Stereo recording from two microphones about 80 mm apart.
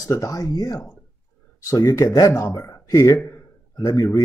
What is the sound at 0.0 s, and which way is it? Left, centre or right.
Speech, left.